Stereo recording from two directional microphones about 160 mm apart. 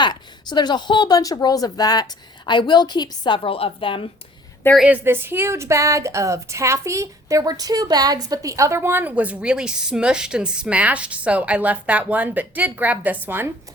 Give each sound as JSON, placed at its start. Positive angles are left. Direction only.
{"t": 0.0, "sound": "speech", "side_deg": 25}
{"t": 4.8, "sound": "a woman's voice", "side_deg": -10}